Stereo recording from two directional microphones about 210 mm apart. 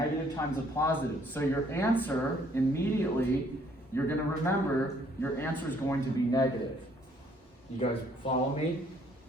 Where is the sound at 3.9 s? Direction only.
15° left (ahead or behind).